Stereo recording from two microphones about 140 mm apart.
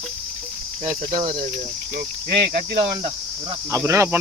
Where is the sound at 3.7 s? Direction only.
20° right (ahead or behind).